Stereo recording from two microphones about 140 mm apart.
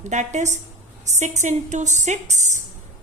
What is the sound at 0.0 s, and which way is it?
A woman's voice, 60° right (ahead or behind).